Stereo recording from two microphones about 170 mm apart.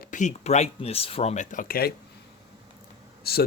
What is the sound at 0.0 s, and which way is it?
Speech, 50° left (ahead or behind).